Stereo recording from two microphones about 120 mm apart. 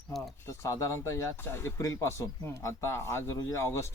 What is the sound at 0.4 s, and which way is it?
Speech, 25° left (ahead or behind).